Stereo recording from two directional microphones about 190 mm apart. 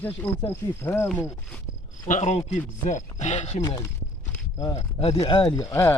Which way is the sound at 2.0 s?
40° left (ahead or behind).